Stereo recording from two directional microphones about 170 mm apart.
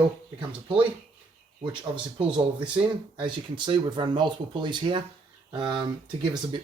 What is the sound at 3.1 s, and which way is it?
Speech, 30° right (ahead or behind).